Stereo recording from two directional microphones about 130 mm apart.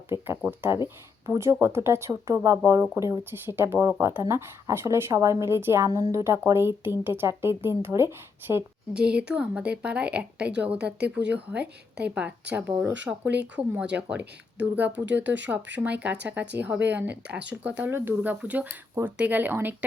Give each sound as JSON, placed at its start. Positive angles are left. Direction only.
{"t": 0.1, "sound": "speech", "side_deg": -15}